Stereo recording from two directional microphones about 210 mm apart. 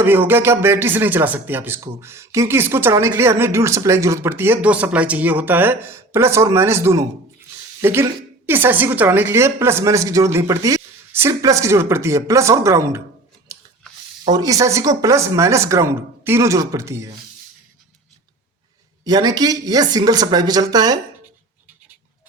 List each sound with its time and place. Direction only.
0.0 s speech: 10° right (ahead or behind)
13.5 s scissors: 15° right (ahead or behind)
14.3 s speech: 15° right (ahead or behind)
19.0 s speech: 20° right (ahead or behind)